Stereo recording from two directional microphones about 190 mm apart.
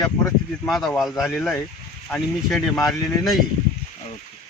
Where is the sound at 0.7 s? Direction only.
Centre (ahead or behind).